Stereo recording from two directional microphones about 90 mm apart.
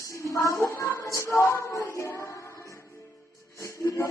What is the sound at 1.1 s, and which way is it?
Music, 30° left (ahead or behind).